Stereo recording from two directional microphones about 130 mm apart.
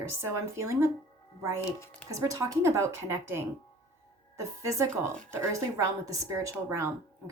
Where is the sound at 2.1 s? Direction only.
25° right (ahead or behind).